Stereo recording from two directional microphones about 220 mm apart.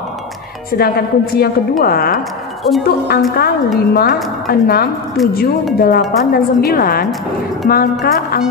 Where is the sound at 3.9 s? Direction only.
45° left (ahead or behind).